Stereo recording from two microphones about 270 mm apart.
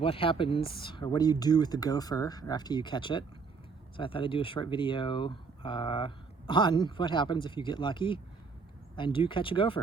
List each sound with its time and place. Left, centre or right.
0.0 s speech: centre